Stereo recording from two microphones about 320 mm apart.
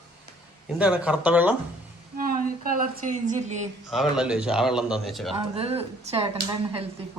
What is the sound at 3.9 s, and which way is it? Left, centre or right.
A man's voice, centre.